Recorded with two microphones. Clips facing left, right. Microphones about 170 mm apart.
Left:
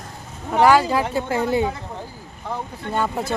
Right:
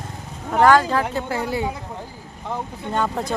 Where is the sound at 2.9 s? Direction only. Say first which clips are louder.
Even; 5° left (ahead or behind).